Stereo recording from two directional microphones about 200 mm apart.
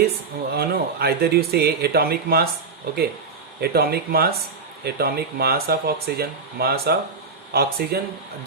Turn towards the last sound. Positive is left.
turn(degrees=-50)  # may be behind; listen again after turning